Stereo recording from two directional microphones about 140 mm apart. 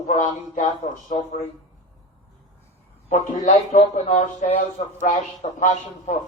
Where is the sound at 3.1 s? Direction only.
55° left (ahead or behind).